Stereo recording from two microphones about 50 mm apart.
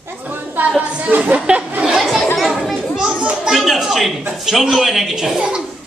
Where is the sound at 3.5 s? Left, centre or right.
Centre.